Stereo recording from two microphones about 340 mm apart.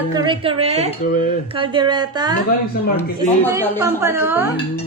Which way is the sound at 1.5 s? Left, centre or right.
Centre.